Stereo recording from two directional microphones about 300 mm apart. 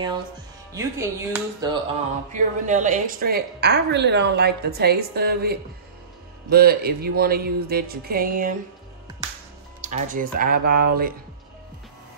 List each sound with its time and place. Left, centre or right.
0.7 s speech: centre
2.3 s a woman's voice: right
9.8 s speech: right